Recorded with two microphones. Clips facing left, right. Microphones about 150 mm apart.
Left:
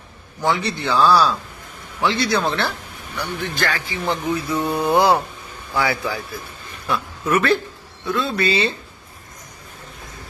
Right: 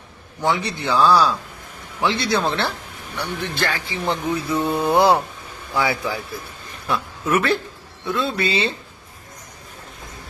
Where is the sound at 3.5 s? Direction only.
30° right (ahead or behind).